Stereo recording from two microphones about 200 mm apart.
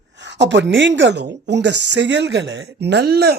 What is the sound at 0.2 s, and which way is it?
A woman's voice, 60° right (ahead or behind).